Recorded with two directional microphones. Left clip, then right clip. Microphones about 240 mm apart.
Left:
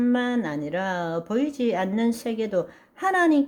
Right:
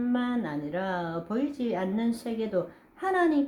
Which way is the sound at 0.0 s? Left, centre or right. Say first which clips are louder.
Left 6 dB; left.